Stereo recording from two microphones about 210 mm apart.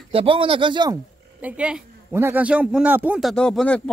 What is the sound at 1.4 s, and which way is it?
A woman's voice, 5° right (ahead or behind).